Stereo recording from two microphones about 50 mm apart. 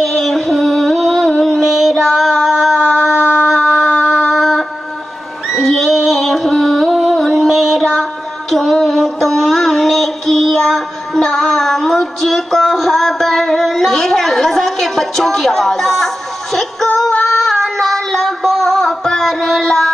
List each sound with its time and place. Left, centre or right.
0.0 s music: centre
1.4 s a sound: centre
5.5 s music: centre
6.9 s music: centre
16.5 s female singing: centre